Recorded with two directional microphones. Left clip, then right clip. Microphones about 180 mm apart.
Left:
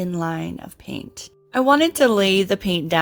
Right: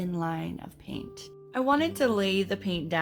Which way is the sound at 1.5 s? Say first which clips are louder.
Left 9 dB; 45° left (ahead or behind).